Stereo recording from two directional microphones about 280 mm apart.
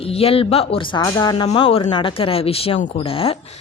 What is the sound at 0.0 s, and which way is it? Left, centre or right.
Speech, left.